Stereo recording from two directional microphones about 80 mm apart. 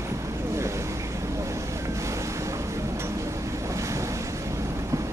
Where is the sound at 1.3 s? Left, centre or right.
Right.